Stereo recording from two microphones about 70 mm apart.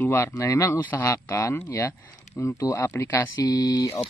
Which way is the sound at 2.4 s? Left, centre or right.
Left.